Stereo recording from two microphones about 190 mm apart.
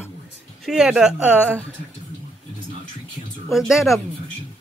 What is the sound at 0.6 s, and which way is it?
Speech, 5° right (ahead or behind).